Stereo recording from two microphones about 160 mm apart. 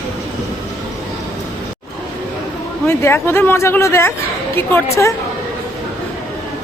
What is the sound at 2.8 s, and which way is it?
Speech, 15° left (ahead or behind).